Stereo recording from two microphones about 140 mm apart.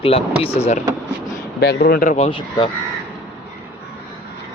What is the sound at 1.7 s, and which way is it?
Speech, 90° left.